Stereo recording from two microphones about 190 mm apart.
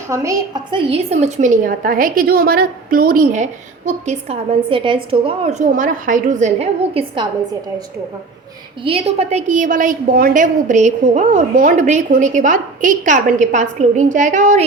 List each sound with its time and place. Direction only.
0.1 s a woman's voice: 15° right (ahead or behind); by 7.3 s 30° right (ahead or behind)
8.8 s a woman's voice: 30° right (ahead or behind)